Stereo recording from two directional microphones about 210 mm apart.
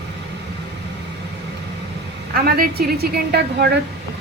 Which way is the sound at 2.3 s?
45° right (ahead or behind).